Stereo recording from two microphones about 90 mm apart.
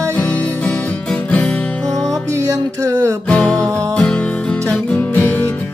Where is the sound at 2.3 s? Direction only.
35° right (ahead or behind).